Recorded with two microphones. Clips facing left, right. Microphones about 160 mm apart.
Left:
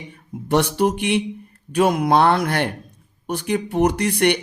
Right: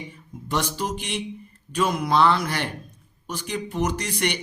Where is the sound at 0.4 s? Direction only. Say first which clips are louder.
Left 9 dB; 60° left (ahead or behind).